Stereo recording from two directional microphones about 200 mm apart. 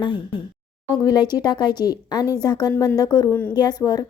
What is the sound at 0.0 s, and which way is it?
A woman's voice, 25° left (ahead or behind).